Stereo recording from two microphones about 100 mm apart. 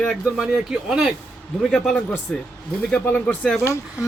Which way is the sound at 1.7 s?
5° left (ahead or behind).